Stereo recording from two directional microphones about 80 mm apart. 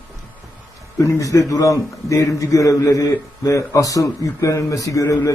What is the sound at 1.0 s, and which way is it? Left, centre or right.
A man's voice, left.